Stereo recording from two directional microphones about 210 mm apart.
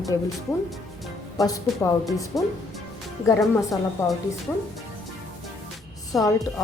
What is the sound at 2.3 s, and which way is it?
A woman's voice, centre (ahead or behind).